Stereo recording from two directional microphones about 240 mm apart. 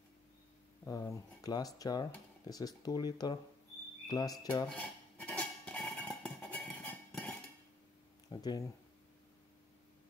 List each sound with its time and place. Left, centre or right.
0.8 s speech: centre
4.6 s dishes: centre
8.3 s speech: centre